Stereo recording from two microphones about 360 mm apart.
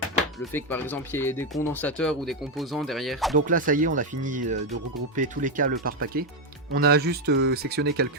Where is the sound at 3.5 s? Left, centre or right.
Right.